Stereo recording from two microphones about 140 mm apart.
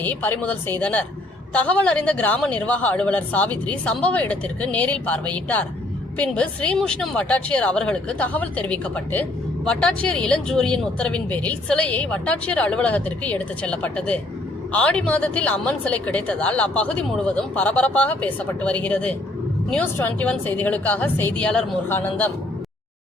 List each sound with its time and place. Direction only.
0.0 s speech: 15° left (ahead or behind)